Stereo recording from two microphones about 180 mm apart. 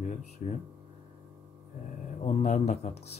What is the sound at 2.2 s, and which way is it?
Speech, 40° left (ahead or behind).